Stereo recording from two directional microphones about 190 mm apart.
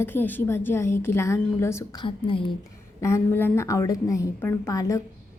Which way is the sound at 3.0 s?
15° left (ahead or behind).